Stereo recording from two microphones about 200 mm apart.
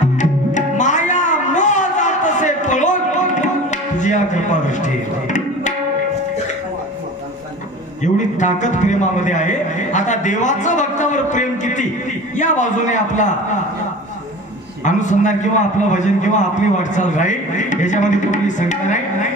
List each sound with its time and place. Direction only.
0.2 s music: 40° left (ahead or behind)
8.0 s a man's voice: 35° left (ahead or behind)
14.9 s a man's voice: 35° left (ahead or behind)